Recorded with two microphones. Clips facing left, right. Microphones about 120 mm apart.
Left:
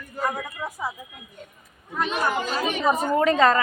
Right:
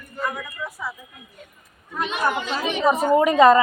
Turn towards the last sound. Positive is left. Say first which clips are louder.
# right 5 dB
turn(degrees=-15)  # may be behind; listen again after turning